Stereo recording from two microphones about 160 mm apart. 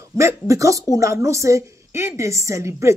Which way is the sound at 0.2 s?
20° right (ahead or behind).